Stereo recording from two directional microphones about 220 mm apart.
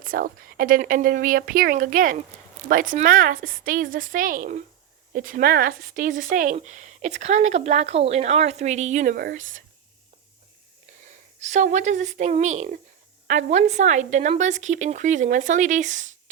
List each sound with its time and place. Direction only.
0.0 s speech: 40° right (ahead or behind)
11.3 s speech: 35° right (ahead or behind)